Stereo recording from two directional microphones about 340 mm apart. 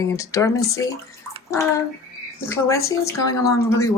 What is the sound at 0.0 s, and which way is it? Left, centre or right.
Speech, centre.